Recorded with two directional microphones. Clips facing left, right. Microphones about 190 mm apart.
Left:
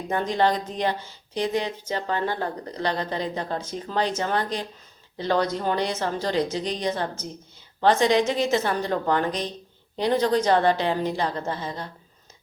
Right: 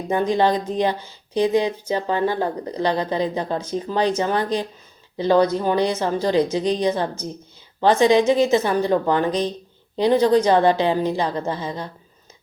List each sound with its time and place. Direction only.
0.1 s a woman's voice: 15° right (ahead or behind)